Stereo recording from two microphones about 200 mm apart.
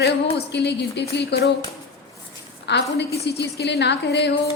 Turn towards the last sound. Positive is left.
turn(degrees=55)  # may be behind; listen again after turning